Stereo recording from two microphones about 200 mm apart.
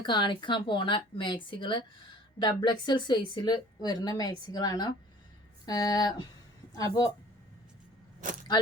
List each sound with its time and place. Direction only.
0.0 s a woman's voice: 20° left (ahead or behind)
8.2 s speech: 40° right (ahead or behind)